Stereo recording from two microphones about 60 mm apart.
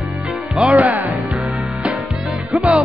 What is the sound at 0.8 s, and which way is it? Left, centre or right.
Music, right.